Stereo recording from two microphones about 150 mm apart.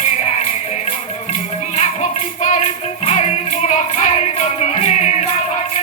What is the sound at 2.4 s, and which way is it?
Music, 50° left (ahead or behind).